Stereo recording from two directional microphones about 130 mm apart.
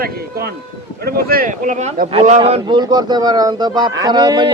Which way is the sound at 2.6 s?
35° right (ahead or behind).